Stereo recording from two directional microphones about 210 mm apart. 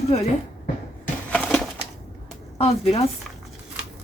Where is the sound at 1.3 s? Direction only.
5° left (ahead or behind).